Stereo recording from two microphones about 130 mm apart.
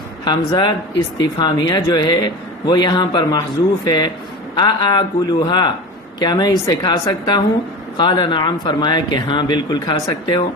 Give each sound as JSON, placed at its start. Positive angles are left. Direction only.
{"t": 0.3, "sound": "speech", "side_deg": 35}